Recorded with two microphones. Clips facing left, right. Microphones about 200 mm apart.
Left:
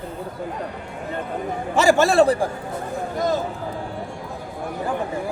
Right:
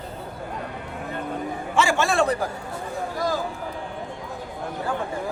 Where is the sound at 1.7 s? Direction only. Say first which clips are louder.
Left 6 dB; 40° left (ahead or behind).